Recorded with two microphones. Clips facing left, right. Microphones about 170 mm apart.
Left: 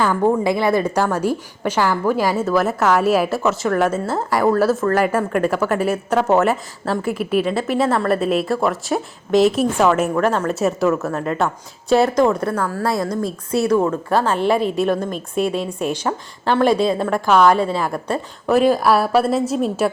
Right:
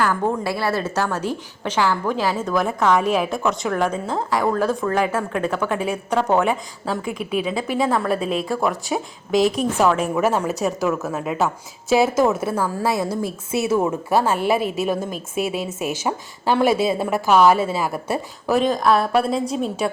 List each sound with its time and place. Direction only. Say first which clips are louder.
0.1 s a woman's voice: left 5 dB; 20° left (ahead or behind); by 18.6 s 5° right (ahead or behind)
18.6 s a woman's voice: left 2 dB; 5° left (ahead or behind)